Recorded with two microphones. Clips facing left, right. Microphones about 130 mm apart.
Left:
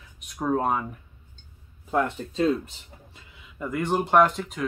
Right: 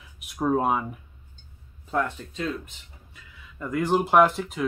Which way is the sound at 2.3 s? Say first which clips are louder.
Left 9 dB; 30° left (ahead or behind).